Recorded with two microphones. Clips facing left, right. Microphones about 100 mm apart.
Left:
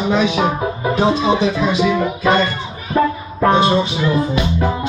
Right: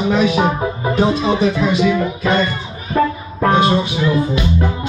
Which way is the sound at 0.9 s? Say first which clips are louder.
Left 1 dB; 20° left (ahead or behind).